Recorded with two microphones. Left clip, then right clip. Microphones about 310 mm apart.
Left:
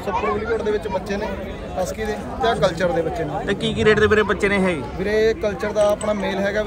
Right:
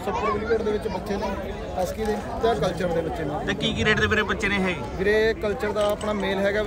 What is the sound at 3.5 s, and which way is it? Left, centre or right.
A man's voice, centre.